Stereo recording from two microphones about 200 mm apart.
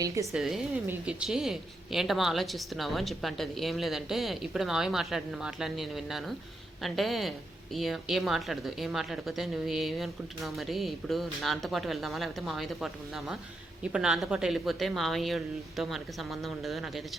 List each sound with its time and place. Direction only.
0.0 s a woman's voice: 15° right (ahead or behind)
0.3 s a woman's voice: centre (ahead or behind)